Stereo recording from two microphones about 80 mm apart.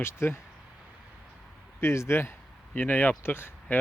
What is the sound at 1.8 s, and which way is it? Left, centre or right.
Speech, left.